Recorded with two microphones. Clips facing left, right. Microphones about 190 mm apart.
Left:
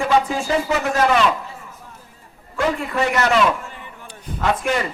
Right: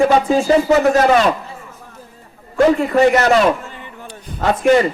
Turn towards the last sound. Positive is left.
turn(degrees=-35)  # may be behind; listen again after turning